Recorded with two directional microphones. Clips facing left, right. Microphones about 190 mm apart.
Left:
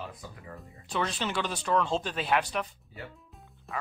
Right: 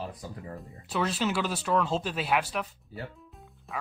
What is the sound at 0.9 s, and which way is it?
A man's voice, 5° right (ahead or behind).